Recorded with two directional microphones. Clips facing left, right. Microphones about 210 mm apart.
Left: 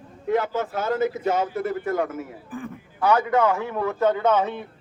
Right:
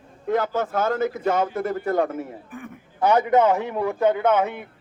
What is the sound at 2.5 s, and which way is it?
Speech, 30° left (ahead or behind).